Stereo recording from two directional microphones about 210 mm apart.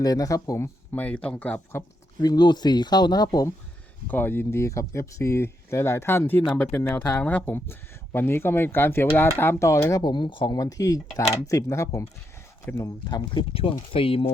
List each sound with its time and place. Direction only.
0.0 s speech: 15° left (ahead or behind)
2.2 s speech: 20° left (ahead or behind)